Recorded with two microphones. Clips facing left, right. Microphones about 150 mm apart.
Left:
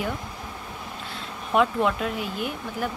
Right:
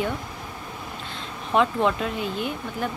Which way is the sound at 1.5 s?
5° left (ahead or behind).